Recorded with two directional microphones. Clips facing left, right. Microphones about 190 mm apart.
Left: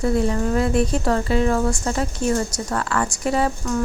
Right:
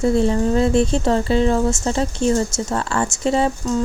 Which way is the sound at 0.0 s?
25° right (ahead or behind).